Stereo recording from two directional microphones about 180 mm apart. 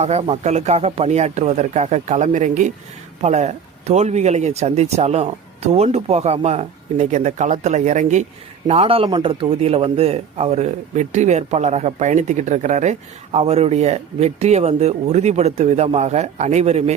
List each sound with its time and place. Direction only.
0.0 s speech: 35° right (ahead or behind)